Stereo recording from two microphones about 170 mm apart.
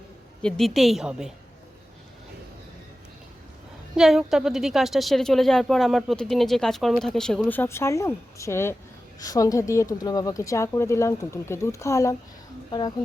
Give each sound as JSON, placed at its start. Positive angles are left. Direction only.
{"t": 0.4, "sound": "a woman's voice", "side_deg": 0}
{"t": 3.9, "sound": "a woman's voice", "side_deg": -5}